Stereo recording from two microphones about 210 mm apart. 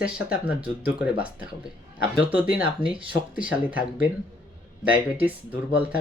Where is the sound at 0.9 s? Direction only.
5° right (ahead or behind).